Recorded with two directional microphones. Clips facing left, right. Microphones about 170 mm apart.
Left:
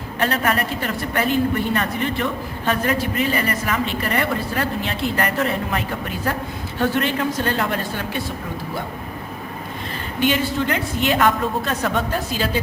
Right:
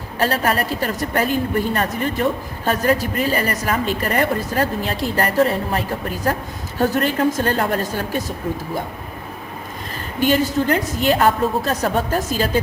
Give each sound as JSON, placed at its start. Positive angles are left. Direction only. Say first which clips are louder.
{"t": 0.2, "sound": "a woman's voice", "louder": "right 2 dB", "side_deg": -35}
{"t": 10.2, "sound": "a woman's voice", "louder": "right 3 dB", "side_deg": -40}